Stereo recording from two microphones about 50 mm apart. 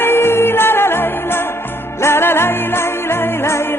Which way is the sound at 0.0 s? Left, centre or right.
Left.